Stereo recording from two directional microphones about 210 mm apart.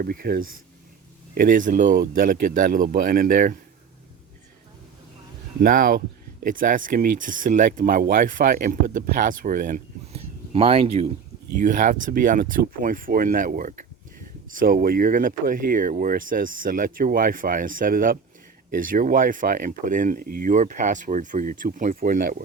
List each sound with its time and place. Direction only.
0.0 s speech: 45° right (ahead or behind)
5.6 s speech: 40° right (ahead or behind)
11.6 s speech: 40° right (ahead or behind)